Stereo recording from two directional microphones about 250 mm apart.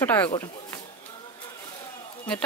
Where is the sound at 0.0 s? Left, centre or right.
Centre.